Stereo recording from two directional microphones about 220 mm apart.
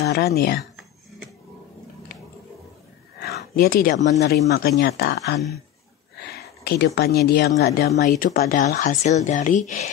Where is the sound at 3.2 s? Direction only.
45° left (ahead or behind).